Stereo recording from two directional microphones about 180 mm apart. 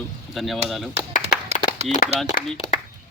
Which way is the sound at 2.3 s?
45° left (ahead or behind).